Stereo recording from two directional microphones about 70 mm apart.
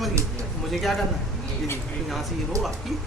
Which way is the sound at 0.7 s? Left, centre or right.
Centre.